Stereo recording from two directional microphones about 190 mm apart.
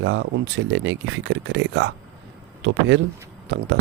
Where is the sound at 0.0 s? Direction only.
80° right.